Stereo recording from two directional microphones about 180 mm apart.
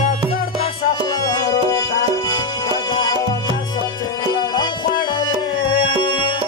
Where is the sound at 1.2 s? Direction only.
20° left (ahead or behind).